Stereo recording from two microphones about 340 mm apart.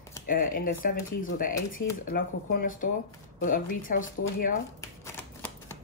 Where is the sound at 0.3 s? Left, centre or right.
Left.